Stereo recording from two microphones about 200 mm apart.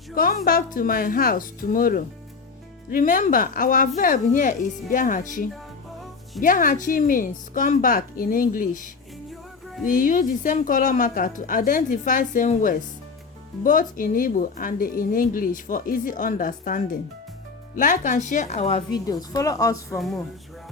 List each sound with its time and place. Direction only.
0.1 s a woman's voice: 45° left (ahead or behind)
9.8 s a woman's voice: 40° left (ahead or behind)
18.9 s a woman's voice: 20° left (ahead or behind)